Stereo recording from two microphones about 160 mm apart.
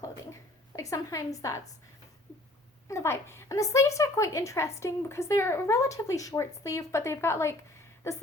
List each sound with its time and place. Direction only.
0.8 s a woman's voice: 20° left (ahead or behind)
2.9 s a woman's voice: 15° left (ahead or behind)